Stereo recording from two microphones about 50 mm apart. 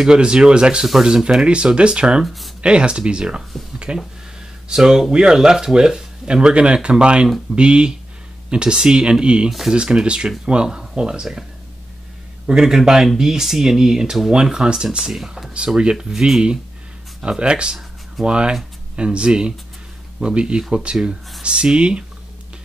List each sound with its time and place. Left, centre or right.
0.0 s speech: centre
2.2 s speech: centre
2.6 s speech: right
4.6 s speech: centre
9.5 s speech: centre
9.8 s speech: centre
12.4 s speech: centre
15.5 s speech: centre